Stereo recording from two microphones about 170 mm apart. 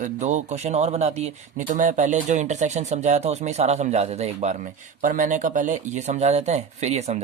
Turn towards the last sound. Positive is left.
turn(degrees=-40)  # may be behind; listen again after turning